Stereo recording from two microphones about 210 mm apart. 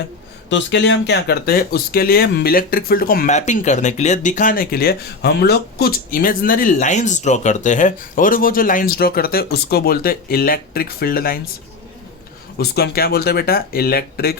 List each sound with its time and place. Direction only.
0.5 s speech: 55° left (ahead or behind)
12.5 s speech: 50° left (ahead or behind)